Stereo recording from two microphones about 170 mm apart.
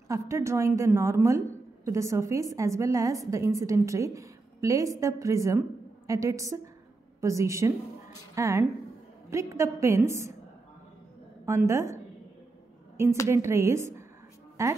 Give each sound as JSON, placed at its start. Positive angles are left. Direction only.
{"t": 0.1, "sound": "a woman's voice", "side_deg": -15}
{"t": 11.4, "sound": "a woman's voice", "side_deg": -15}